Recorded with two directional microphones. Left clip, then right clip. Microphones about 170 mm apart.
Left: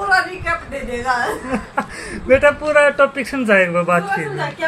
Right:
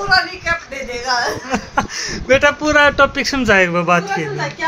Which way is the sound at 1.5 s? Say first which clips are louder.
Right 3 dB; 35° right (ahead or behind).